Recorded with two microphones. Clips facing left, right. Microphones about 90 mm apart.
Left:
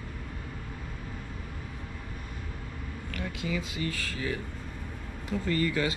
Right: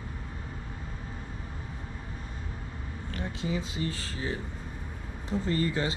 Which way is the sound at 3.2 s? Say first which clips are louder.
Right 1 dB; 30° right (ahead or behind).